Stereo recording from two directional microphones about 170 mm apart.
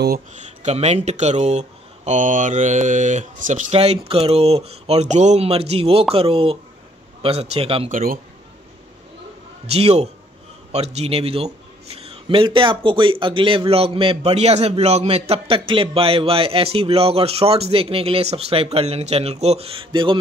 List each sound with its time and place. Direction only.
0.3 s a man's voice: 40° right (ahead or behind)
7.9 s a man's voice: 55° right (ahead or behind)
9.7 s a man's voice: 35° right (ahead or behind)